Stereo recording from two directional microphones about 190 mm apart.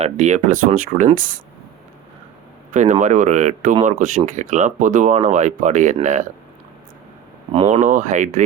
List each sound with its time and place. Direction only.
0.0 s speech: 40° right (ahead or behind)
2.7 s speech: 40° right (ahead or behind)
7.5 s speech: 30° right (ahead or behind)